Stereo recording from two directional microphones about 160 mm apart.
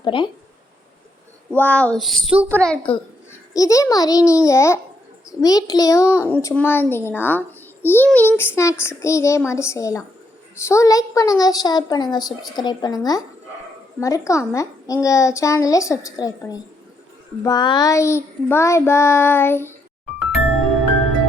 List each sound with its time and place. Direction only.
0.0 s speech: 30° left (ahead or behind)
1.5 s a sound: 10° left (ahead or behind)
3.5 s a woman's voice: 20° left (ahead or behind)